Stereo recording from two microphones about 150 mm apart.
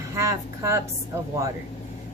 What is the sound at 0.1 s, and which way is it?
A woman's voice, 20° right (ahead or behind).